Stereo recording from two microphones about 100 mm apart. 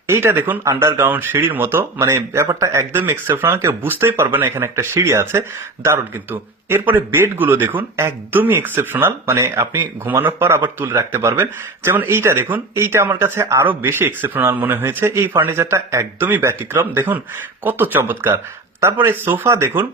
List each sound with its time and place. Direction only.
0.1 s a man's voice: 25° right (ahead or behind)